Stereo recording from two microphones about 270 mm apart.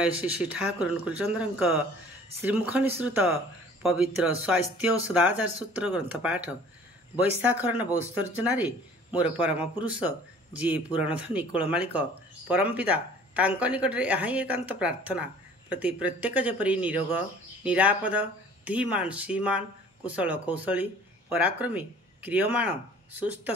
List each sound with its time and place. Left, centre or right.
0.0 s speech: centre
9.2 s speech: centre